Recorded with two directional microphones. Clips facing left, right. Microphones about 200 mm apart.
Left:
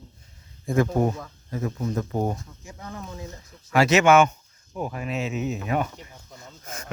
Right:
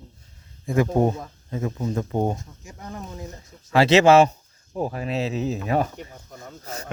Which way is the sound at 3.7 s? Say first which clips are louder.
Right 3 dB; 30° right (ahead or behind).